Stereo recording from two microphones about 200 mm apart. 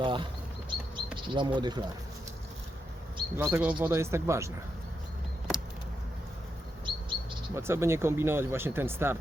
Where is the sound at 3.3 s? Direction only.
10° right (ahead or behind).